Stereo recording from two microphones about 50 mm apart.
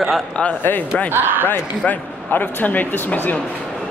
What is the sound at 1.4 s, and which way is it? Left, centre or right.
Speech, left.